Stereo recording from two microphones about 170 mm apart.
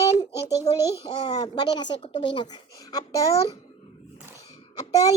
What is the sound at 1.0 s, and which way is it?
Speech, 25° left (ahead or behind).